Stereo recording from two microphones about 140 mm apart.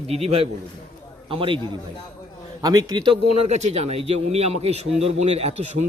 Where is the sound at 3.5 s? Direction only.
50° right (ahead or behind).